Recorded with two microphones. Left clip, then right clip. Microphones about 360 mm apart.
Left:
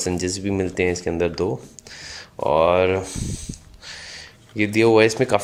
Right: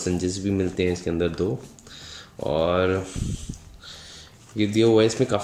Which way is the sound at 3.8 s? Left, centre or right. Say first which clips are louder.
Left 5 dB; centre.